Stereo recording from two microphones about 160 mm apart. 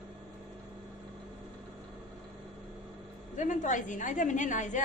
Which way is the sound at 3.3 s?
50° left (ahead or behind).